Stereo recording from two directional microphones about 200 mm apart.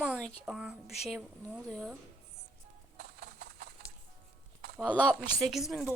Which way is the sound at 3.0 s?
55° right (ahead or behind).